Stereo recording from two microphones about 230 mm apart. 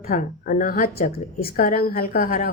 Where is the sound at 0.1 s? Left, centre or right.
Left.